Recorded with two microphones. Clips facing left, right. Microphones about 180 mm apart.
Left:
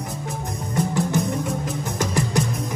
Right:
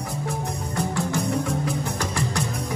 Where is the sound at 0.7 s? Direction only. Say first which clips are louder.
Left 4 dB; 20° left (ahead or behind).